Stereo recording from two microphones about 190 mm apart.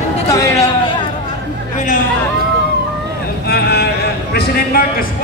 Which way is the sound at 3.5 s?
55° left (ahead or behind).